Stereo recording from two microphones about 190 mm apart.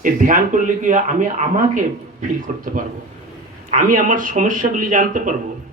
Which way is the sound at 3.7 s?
45° right (ahead or behind).